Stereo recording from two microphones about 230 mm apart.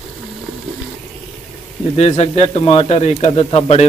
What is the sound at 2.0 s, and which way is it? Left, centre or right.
A man's voice, left.